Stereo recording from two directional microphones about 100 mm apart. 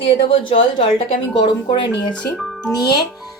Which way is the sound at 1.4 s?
50° left (ahead or behind).